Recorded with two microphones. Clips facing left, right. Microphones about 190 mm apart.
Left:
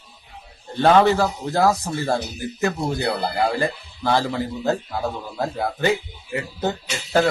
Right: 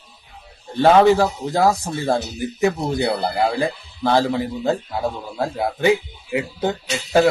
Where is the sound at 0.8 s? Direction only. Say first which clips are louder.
Right 3 dB; 15° right (ahead or behind).